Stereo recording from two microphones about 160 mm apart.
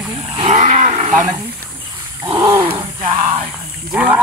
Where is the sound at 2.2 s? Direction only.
25° right (ahead or behind).